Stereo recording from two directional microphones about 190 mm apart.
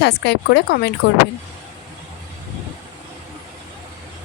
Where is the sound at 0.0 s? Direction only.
60° left (ahead or behind).